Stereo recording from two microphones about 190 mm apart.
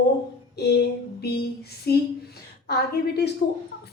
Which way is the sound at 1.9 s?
55° left (ahead or behind).